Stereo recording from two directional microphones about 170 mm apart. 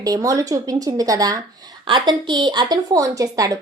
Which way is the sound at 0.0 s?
20° right (ahead or behind).